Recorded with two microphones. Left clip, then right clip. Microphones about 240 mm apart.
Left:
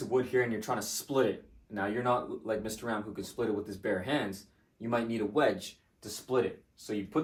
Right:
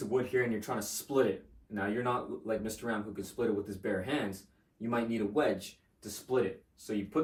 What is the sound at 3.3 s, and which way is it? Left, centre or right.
Speech, centre.